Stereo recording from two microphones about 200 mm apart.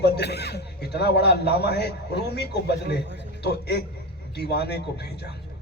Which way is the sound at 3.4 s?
55° left (ahead or behind).